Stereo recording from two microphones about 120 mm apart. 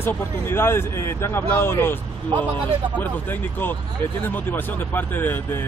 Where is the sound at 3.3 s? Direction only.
15° left (ahead or behind).